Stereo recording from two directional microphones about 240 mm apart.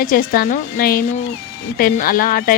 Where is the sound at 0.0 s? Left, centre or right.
Left.